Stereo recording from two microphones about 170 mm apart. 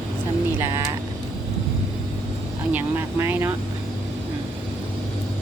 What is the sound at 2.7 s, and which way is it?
Speech, 15° right (ahead or behind).